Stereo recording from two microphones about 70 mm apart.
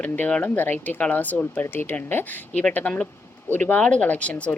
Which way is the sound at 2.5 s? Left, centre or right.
Centre.